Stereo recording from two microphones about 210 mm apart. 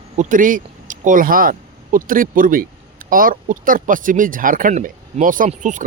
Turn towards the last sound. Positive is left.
turn(degrees=-35)  # may be behind; listen again after turning